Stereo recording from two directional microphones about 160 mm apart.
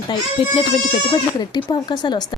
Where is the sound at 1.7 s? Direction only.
30° left (ahead or behind).